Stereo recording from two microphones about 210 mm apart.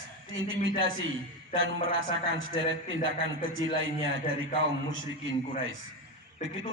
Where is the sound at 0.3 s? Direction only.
65° right (ahead or behind).